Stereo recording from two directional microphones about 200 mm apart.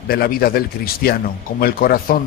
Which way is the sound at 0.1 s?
50° left (ahead or behind).